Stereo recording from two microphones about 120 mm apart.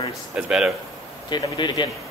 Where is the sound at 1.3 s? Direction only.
40° left (ahead or behind).